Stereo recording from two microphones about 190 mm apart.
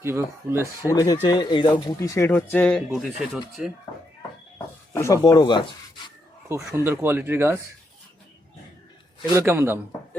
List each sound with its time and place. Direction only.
0.0 s speech: 15° right (ahead or behind)
0.8 s speech: 15° left (ahead or behind); by 3.7 s centre (ahead or behind)
4.5 s speech: 15° left (ahead or behind)
6.7 s speech: 10° right (ahead or behind)
9.3 s speech: 15° right (ahead or behind)